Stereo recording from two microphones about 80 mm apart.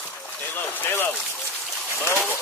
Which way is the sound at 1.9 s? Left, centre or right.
Left.